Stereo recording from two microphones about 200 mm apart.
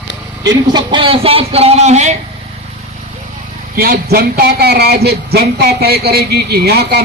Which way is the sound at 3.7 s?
50° right (ahead or behind).